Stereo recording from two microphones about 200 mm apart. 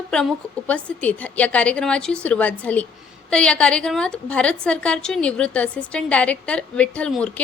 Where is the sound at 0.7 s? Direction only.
5° left (ahead or behind).